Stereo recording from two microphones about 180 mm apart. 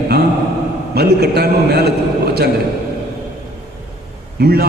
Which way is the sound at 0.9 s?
65° right (ahead or behind).